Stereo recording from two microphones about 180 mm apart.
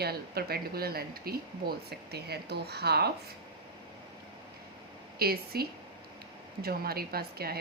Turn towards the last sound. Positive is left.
turn(degrees=-60)  # may be behind; listen again after turning